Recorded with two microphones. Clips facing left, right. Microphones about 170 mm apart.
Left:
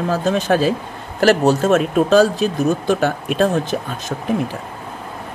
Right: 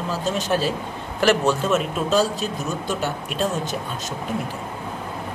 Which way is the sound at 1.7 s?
55° left (ahead or behind).